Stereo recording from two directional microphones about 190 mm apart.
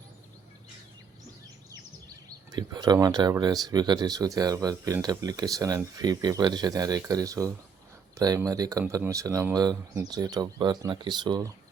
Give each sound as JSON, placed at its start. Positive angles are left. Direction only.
{"t": 2.5, "sound": "speech", "side_deg": -20}